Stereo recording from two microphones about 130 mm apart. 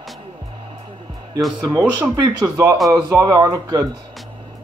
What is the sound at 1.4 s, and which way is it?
Speech, centre (ahead or behind).